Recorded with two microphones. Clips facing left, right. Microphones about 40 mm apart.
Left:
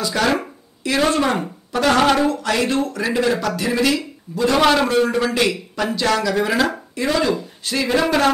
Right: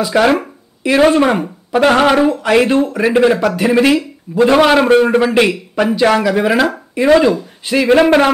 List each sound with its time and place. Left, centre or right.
0.0 s speech: right
4.8 s a man's voice: right
7.9 s a man's voice: right